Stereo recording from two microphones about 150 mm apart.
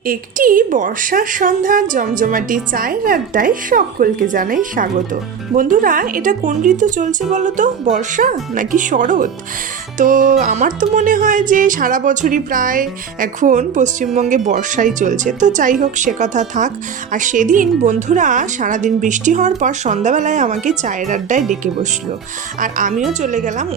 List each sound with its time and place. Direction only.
0.1 s speech: 65° right (ahead or behind)
22.6 s speech: 60° right (ahead or behind)